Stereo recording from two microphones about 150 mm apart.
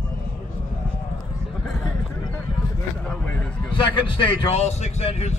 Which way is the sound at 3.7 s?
35° left (ahead or behind).